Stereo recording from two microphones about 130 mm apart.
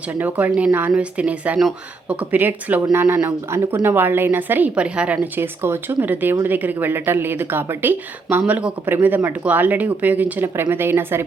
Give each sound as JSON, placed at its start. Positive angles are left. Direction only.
{"t": 0.1, "sound": "a woman's voice", "side_deg": -10}